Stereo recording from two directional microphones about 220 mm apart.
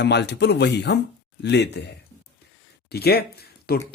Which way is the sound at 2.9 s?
45° left (ahead or behind).